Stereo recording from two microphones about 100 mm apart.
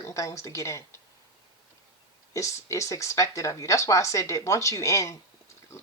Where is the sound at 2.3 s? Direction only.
30° left (ahead or behind).